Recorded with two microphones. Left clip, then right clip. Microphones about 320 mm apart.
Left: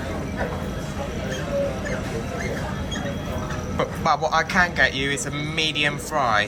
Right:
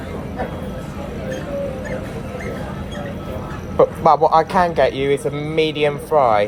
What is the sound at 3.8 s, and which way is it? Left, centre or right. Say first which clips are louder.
Speech: right 9 dB; centre.